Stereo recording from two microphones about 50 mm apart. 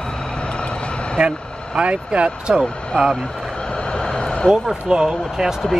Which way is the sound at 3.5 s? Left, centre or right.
Centre.